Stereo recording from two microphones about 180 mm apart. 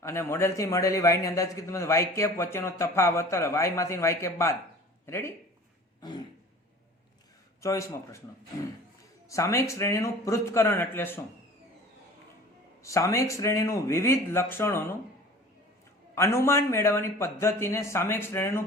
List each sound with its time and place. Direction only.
0.0 s a man's voice: 15° left (ahead or behind)
6.0 s throat clearing: 25° left (ahead or behind)
7.6 s a man's voice: 15° left (ahead or behind)
9.3 s a man's voice: 15° left (ahead or behind)
12.8 s a man's voice: 15° left (ahead or behind)
16.1 s a man's voice: 15° left (ahead or behind)